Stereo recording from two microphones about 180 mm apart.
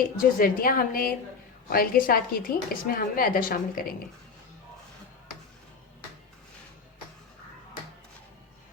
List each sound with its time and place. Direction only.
0.0 s a woman's voice: 50° left (ahead or behind)